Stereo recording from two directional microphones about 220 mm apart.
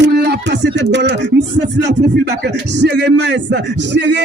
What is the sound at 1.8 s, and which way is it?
Speech, 50° right (ahead or behind).